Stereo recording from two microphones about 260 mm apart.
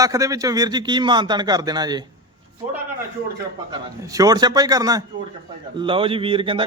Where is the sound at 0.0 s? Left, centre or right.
Centre.